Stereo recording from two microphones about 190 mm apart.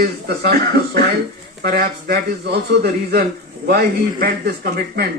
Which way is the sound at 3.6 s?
55° right (ahead or behind).